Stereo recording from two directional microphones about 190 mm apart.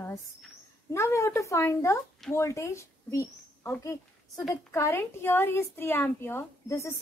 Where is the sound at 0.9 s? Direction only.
15° left (ahead or behind).